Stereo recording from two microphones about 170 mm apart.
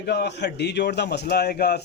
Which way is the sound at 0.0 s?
75° left (ahead or behind).